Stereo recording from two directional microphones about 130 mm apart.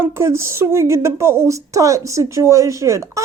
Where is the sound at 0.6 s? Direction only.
20° right (ahead or behind).